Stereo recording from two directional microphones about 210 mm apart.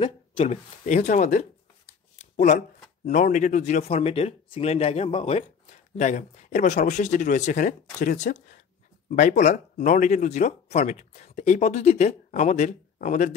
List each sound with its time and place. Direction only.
0.0 s a man's voice: 25° left (ahead or behind)